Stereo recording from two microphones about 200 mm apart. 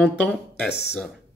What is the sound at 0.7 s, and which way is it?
Speech, 55° left (ahead or behind).